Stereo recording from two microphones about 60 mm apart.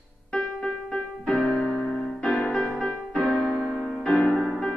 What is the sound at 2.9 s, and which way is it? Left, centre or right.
Keyboard, centre.